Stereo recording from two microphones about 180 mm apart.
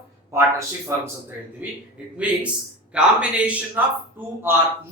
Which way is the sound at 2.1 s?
5° right (ahead or behind).